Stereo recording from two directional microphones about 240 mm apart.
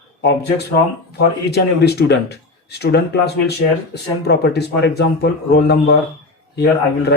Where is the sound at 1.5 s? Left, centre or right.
Left.